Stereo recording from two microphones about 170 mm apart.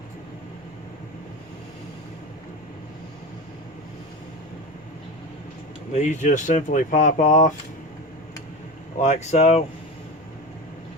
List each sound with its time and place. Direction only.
5.9 s speech: 45° left (ahead or behind)
9.0 s speech: 40° left (ahead or behind)